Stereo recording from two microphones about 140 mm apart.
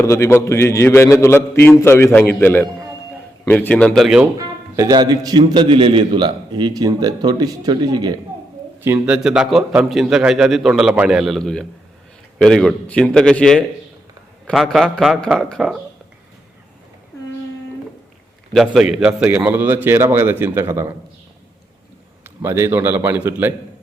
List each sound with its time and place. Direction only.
0.0 s a man's voice: 20° left (ahead or behind); by 4.3 s centre (ahead or behind)
4.4 s a man's voice: 25° right (ahead or behind)
8.8 s a man's voice: 15° right (ahead or behind)
9.1 s a man's voice: 5° right (ahead or behind)
18.5 s a man's voice: centre (ahead or behind); by 20.9 s 20° right (ahead or behind)
22.2 s a man's voice: 15° right (ahead or behind)